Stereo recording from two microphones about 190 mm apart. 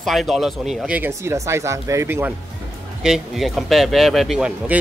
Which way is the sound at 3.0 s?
Centre (ahead or behind).